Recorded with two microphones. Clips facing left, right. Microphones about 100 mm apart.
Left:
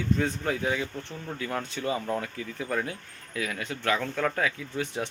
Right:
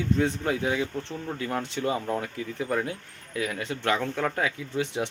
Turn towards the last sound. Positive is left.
turn(degrees=-20)  # may be behind; listen again after turning